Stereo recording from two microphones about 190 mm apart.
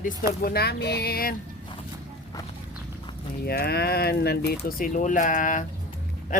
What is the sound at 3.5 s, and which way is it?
Speech, 55° left (ahead or behind).